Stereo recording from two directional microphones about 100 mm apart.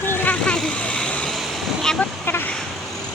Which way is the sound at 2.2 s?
20° left (ahead or behind).